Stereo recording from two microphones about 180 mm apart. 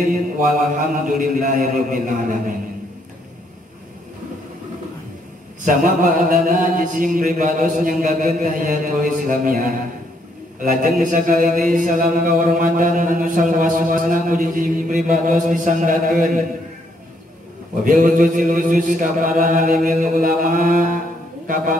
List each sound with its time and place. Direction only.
0.0 s mantra: 50° right (ahead or behind)
5.7 s mantra: 50° right (ahead or behind)
17.8 s mantra: 50° right (ahead or behind)